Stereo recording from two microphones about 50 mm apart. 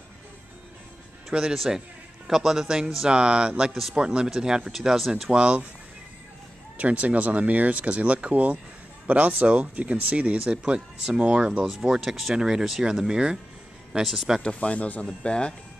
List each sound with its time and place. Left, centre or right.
1.3 s speech: centre
4.7 s speech: centre
5.3 s speech: right
6.8 s speech: right
11.5 s speech: centre
14.4 s speech: left